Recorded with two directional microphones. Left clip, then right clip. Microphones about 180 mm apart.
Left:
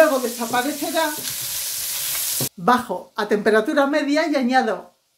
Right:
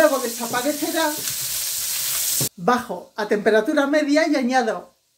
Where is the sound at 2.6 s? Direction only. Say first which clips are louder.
Left 3 dB; 15° left (ahead or behind).